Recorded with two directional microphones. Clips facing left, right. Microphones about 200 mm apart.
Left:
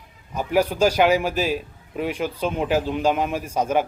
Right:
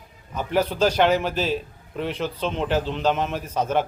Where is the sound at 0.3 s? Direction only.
10° left (ahead or behind).